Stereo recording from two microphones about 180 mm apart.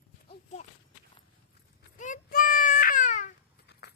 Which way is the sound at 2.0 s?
50° left (ahead or behind).